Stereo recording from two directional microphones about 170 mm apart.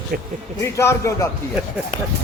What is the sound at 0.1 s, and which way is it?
Speech, 60° right (ahead or behind).